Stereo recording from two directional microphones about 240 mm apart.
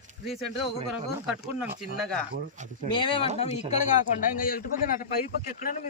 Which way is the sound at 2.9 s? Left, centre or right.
Centre.